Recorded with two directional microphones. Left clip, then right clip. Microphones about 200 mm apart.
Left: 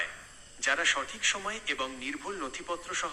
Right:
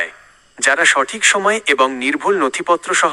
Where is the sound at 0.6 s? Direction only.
50° right (ahead or behind).